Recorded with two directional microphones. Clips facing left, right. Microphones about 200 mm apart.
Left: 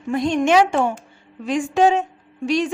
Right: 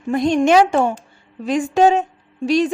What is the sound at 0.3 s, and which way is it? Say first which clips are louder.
A woman's voice: right 2 dB; 35° right (ahead or behind).